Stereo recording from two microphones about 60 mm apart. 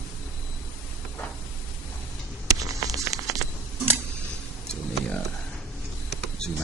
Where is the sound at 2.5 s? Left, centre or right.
Right.